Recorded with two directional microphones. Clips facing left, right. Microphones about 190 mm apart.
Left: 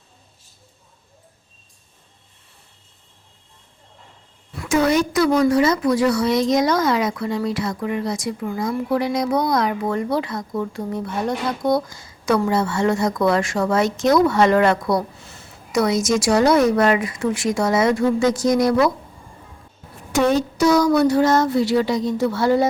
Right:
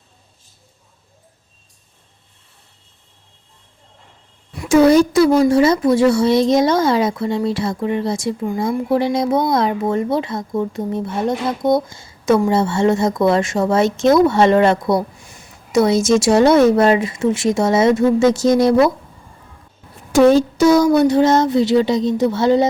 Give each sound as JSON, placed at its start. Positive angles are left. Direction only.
{"t": 4.7, "sound": "a child's voice", "side_deg": -35}
{"t": 15.7, "sound": "speech", "side_deg": -25}
{"t": 20.1, "sound": "speech", "side_deg": -30}